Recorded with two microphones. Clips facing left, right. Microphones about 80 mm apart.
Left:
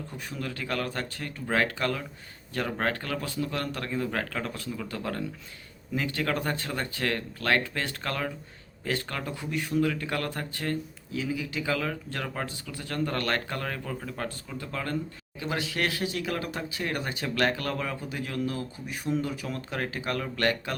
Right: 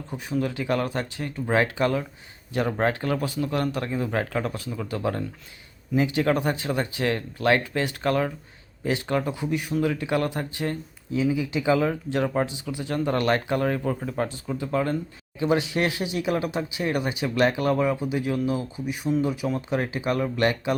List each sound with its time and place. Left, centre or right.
0.1 s speech: centre